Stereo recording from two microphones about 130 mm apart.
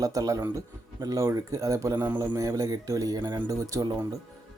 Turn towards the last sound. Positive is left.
turn(degrees=-30)  # may be behind; listen again after turning